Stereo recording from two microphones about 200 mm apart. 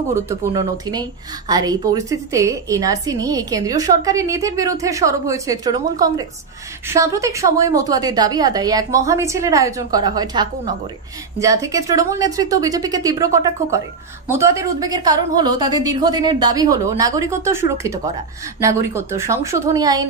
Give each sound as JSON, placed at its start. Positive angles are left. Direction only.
{"t": 0.1, "sound": "a woman's voice", "side_deg": -15}